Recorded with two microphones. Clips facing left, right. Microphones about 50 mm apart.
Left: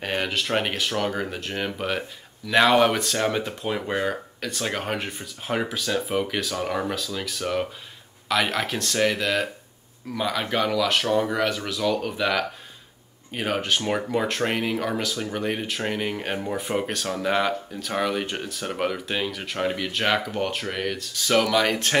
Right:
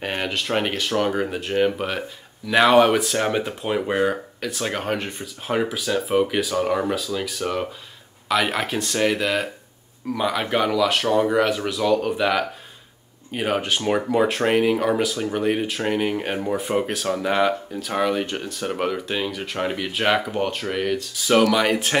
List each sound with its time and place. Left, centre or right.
0.0 s speech: centre
10.7 s speech: centre